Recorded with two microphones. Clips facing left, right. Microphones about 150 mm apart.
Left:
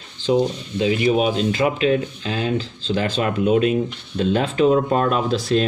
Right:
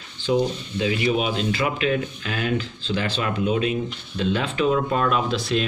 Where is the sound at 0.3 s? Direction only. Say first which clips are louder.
Left 3 dB; 35° left (ahead or behind).